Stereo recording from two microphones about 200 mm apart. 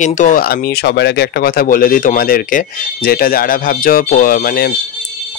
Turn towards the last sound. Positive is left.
turn(degrees=45)  # may be behind; listen again after turning